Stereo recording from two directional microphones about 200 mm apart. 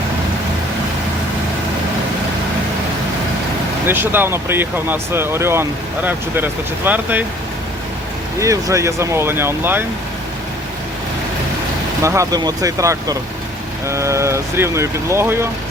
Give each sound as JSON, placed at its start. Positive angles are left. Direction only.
{"t": 3.8, "sound": "speech", "side_deg": -10}
{"t": 8.4, "sound": "speech", "side_deg": -15}
{"t": 12.0, "sound": "speech", "side_deg": -15}